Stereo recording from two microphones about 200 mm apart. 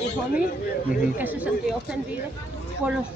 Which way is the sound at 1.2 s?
10° right (ahead or behind).